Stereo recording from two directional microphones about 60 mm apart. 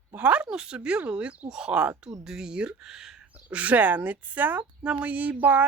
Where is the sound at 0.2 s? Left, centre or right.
Right.